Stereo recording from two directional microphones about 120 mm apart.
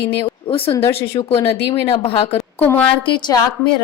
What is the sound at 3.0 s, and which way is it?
Speech, 40° left (ahead or behind).